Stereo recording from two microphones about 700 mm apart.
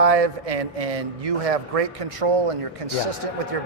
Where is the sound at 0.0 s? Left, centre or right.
Right.